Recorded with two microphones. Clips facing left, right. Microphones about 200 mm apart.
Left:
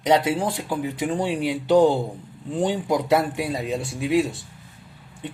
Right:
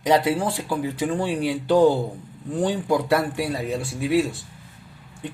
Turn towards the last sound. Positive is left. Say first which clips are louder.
# even
turn(degrees=20)  # may be behind; listen again after turning